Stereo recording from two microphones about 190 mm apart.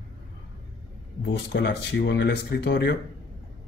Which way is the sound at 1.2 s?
60° left (ahead or behind).